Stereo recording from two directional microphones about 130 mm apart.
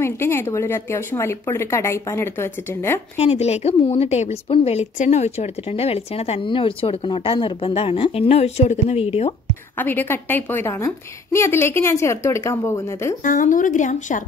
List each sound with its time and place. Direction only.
0.0 s a woman's voice: 20° left (ahead or behind)
3.2 s speech: 55° left (ahead or behind)
9.8 s a woman's voice: 15° left (ahead or behind)
13.2 s speech: 90° left